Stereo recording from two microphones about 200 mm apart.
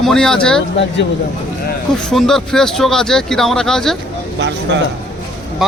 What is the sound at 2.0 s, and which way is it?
Speech, centre (ahead or behind).